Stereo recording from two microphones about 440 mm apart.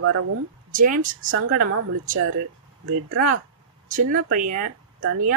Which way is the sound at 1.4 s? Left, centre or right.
Right.